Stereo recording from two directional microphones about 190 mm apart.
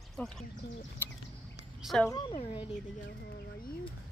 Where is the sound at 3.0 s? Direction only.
55° left (ahead or behind).